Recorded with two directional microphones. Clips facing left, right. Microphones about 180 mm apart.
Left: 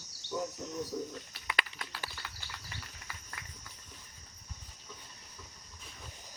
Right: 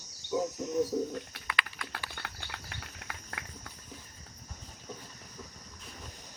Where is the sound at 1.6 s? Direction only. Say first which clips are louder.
Right 2 dB; 55° right (ahead or behind).